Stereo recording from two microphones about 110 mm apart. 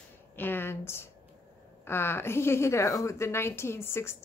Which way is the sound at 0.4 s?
20° left (ahead or behind).